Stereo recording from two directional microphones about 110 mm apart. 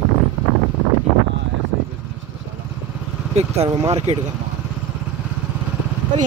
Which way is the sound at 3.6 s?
35° right (ahead or behind).